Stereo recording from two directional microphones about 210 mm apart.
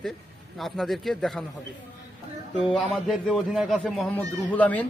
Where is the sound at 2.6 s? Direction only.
Centre (ahead or behind).